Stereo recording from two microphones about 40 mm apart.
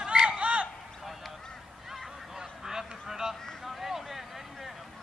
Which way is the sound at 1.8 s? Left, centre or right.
Centre.